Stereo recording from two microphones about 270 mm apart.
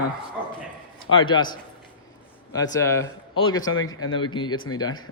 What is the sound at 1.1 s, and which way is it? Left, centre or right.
Speech, centre.